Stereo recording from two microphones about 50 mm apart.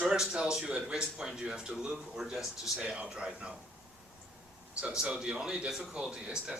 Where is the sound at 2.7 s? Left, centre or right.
Centre.